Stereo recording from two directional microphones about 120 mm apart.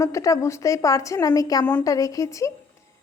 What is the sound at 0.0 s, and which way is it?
A woman's voice, 25° left (ahead or behind).